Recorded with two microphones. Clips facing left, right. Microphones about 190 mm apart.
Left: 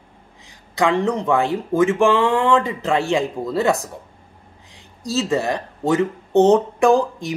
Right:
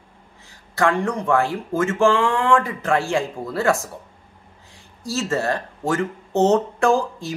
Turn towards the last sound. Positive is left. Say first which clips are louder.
# left 3 dB
turn(degrees=15)  # may be behind; listen again after turning